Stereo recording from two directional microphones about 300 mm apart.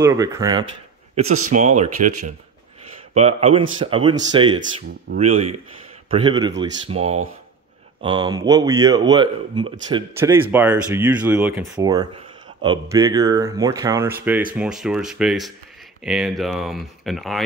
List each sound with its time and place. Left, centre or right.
0.0 s speech: centre